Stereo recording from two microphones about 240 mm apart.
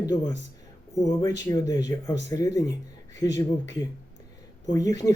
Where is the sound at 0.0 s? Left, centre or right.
Centre.